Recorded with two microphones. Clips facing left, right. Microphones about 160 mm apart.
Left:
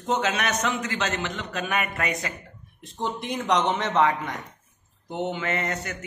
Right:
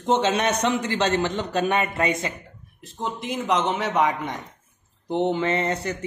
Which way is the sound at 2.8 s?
Centre (ahead or behind).